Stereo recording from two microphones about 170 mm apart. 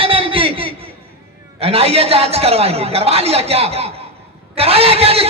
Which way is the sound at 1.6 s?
35° right (ahead or behind).